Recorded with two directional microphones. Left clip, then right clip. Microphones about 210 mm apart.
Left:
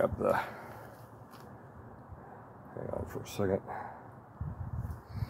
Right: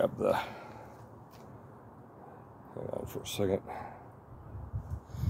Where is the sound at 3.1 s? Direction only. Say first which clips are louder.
Right 1 dB; 20° right (ahead or behind).